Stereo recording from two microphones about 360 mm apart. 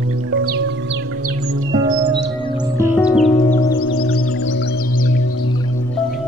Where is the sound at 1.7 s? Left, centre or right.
Centre.